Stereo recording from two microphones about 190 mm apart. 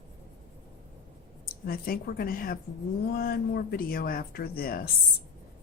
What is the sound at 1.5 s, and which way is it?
Speech, 50° left (ahead or behind).